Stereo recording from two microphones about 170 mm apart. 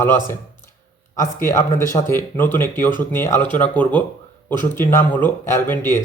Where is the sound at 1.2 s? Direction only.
15° left (ahead or behind).